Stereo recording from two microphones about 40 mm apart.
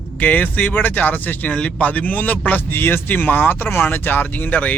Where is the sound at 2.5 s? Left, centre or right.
Left.